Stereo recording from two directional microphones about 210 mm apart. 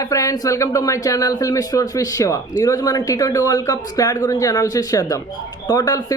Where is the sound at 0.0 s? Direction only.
15° left (ahead or behind).